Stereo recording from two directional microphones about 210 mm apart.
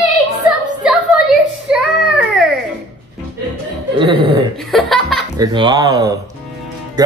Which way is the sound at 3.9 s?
25° right (ahead or behind).